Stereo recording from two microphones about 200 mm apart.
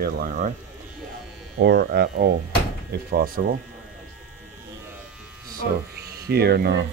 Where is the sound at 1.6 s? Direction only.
55° right (ahead or behind).